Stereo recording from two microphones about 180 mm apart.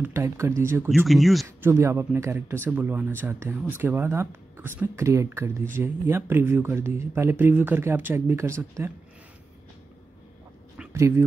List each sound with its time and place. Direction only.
0.0 s speech: 15° right (ahead or behind)
0.8 s speech: centre (ahead or behind)
1.6 s speech: 15° right (ahead or behind)
10.9 s speech: 15° right (ahead or behind)